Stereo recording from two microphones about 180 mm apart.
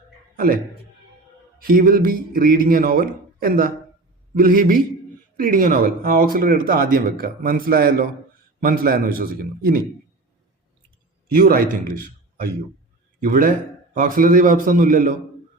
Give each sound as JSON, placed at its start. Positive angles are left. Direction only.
{"t": 0.3, "sound": "a man's voice", "side_deg": -55}
{"t": 11.3, "sound": "a man's voice", "side_deg": -55}